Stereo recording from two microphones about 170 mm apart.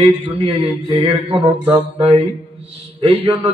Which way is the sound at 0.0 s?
35° right (ahead or behind).